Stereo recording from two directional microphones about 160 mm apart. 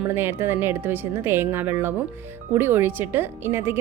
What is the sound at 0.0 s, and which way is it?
A woman's voice, 15° right (ahead or behind).